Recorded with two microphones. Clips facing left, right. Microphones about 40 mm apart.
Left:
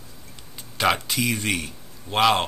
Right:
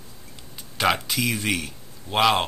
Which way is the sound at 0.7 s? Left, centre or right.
Centre.